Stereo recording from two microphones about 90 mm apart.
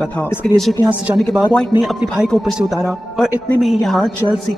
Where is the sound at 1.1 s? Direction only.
5° right (ahead or behind).